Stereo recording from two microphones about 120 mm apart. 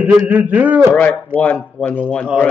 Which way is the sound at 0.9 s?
10° left (ahead or behind).